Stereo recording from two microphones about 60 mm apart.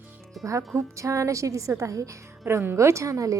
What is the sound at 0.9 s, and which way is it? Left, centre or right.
Speech, right.